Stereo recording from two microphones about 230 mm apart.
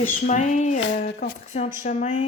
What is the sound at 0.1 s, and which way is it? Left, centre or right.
Speech, left.